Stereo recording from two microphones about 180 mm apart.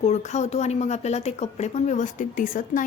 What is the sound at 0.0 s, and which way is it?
Speech, 40° left (ahead or behind).